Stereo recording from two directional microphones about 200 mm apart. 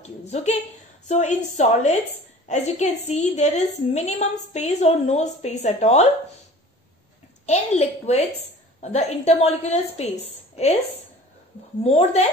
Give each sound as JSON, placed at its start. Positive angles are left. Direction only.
{"t": 0.0, "sound": "a woman's voice", "side_deg": 35}
{"t": 7.4, "sound": "a woman's voice", "side_deg": 35}
{"t": 11.8, "sound": "a woman's voice", "side_deg": 30}